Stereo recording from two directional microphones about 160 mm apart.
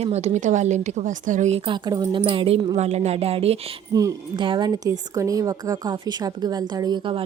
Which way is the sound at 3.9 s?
20° right (ahead or behind).